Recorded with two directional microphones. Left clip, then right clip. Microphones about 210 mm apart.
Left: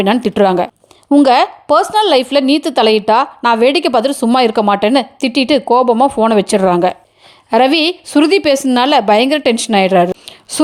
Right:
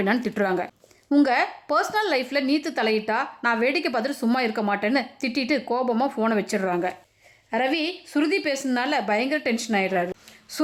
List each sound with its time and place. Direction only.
0.0 s a woman's voice: 30° left (ahead or behind)